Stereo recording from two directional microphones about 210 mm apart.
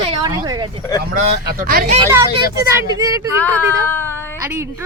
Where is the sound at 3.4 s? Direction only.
10° left (ahead or behind).